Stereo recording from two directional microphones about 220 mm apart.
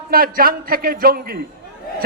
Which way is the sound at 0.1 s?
40° right (ahead or behind).